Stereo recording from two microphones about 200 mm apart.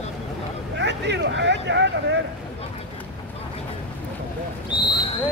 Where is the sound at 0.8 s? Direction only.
60° right (ahead or behind).